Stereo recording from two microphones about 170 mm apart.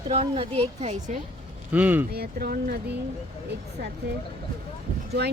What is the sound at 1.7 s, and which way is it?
Speech, 10° right (ahead or behind).